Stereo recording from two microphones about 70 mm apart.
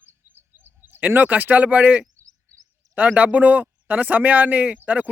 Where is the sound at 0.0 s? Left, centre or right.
Right.